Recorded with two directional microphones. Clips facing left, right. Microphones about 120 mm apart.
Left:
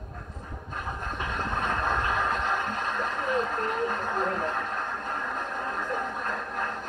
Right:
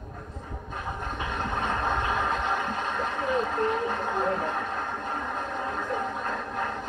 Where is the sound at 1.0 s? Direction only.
20° right (ahead or behind).